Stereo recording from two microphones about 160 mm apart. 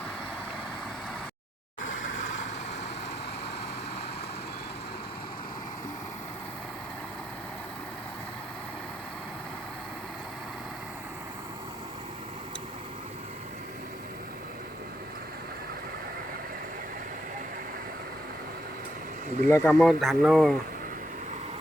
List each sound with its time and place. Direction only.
19.5 s speech: 15° left (ahead or behind)
19.8 s speech: centre (ahead or behind)